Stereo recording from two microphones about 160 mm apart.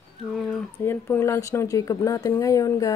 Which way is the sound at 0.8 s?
15° left (ahead or behind).